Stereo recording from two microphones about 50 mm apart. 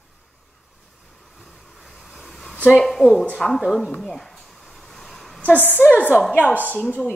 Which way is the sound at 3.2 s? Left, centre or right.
Centre.